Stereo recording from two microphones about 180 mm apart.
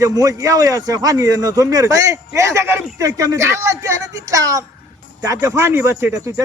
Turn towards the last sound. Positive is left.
turn(degrees=-15)  # may be behind; listen again after turning